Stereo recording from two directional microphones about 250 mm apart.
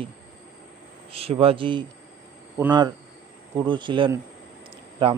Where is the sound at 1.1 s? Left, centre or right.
Right.